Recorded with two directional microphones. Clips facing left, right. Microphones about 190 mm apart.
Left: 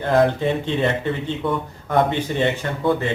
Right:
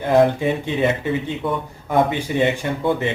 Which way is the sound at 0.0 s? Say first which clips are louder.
Right 2 dB; 10° right (ahead or behind).